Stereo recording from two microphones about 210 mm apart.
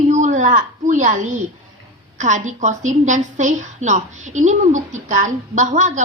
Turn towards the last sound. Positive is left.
turn(degrees=-35)  # may be behind; listen again after turning